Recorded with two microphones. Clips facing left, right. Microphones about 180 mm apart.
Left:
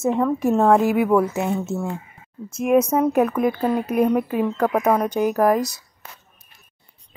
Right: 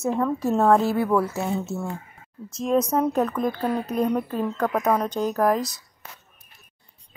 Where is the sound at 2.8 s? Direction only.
10° left (ahead or behind).